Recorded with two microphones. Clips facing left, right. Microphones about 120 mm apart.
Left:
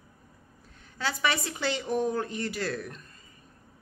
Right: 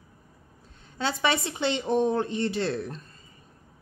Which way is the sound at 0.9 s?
25° right (ahead or behind).